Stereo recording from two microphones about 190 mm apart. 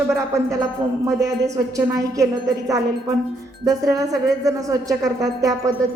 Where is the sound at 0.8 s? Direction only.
25° right (ahead or behind).